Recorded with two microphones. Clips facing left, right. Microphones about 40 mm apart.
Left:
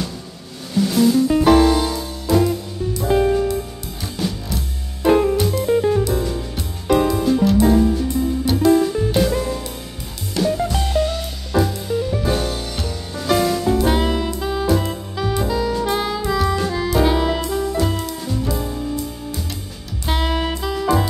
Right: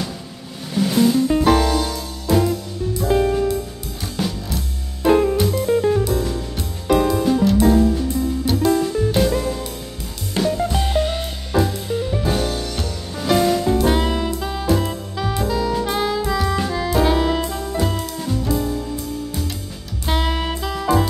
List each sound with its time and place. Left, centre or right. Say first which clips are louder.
0.7 s music: left 1 dB; centre
1.3 s music: left 3 dB; centre
2.3 s music: left 1 dB; centre
10.4 s music: left 1 dB; centre
10.9 s music: even; right
11.5 s music: left 1 dB; centre
13.7 s saxophone: even; centre
16.6 s music: left 1 dB; centre
20.1 s music: left 1 dB; centre